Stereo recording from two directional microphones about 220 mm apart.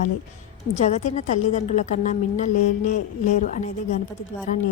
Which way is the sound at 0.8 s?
30° left (ahead or behind).